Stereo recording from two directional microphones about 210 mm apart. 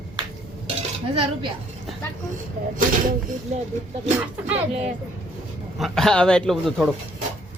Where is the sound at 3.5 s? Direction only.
35° right (ahead or behind).